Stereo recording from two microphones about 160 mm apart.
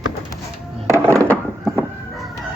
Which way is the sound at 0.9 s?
15° right (ahead or behind).